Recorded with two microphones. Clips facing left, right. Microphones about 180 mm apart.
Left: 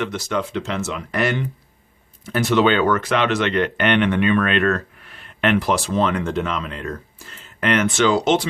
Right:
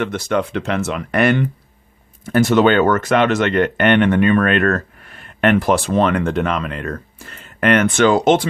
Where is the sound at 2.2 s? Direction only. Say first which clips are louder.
Right 4 dB; 50° right (ahead or behind).